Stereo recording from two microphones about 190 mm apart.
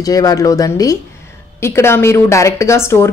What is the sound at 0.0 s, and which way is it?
A woman's voice, 20° left (ahead or behind).